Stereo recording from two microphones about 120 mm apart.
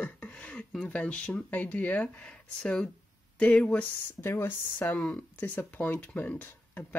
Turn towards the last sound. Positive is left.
turn(degrees=15)  # may be behind; listen again after turning